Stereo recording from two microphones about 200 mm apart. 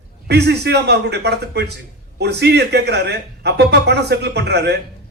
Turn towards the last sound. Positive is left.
turn(degrees=-55)  # may be behind; listen again after turning